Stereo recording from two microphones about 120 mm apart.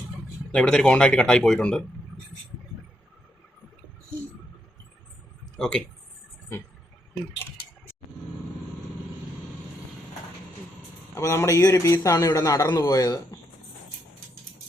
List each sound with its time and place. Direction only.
0.5 s speech: 5° left (ahead or behind)
5.5 s speech: 5° left (ahead or behind)
11.1 s a man's voice: 25° left (ahead or behind)